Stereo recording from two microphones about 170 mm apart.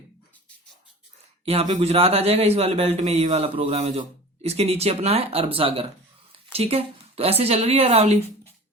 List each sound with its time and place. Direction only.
1.5 s a man's voice: 40° right (ahead or behind)